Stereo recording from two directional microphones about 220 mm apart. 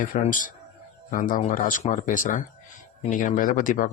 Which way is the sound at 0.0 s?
35° left (ahead or behind).